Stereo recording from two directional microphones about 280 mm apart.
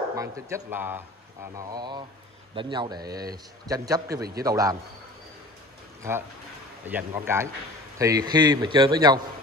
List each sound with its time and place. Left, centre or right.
0.1 s a man's voice: centre
6.9 s a man's voice: centre